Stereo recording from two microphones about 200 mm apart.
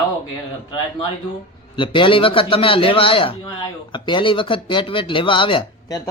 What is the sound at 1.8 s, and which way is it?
Speech, 25° left (ahead or behind).